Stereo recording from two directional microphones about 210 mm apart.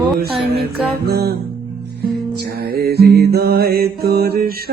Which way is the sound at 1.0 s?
50° right (ahead or behind).